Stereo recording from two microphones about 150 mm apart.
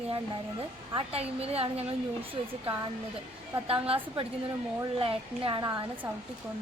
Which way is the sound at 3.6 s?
40° right (ahead or behind).